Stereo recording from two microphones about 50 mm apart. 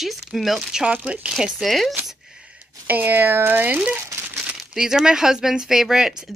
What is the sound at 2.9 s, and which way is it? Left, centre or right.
Speech, right.